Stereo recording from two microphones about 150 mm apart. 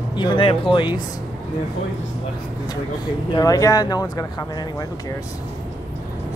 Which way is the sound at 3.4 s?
25° left (ahead or behind).